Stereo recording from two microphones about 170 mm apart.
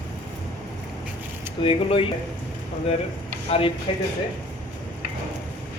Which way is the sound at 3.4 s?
35° left (ahead or behind).